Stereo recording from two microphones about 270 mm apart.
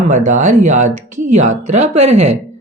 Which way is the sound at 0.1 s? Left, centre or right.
Right.